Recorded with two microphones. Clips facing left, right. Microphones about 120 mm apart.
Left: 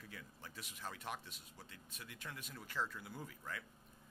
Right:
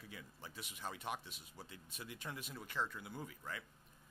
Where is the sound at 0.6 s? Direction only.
15° right (ahead or behind).